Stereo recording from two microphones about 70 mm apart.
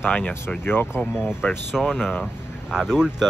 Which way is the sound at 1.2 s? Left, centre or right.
Centre.